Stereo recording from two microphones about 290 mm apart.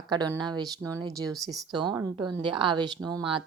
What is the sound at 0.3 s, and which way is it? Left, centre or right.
Speech, centre.